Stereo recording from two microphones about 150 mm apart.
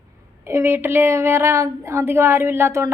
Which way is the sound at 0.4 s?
15° right (ahead or behind).